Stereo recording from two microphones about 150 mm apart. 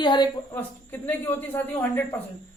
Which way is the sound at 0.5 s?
10° left (ahead or behind).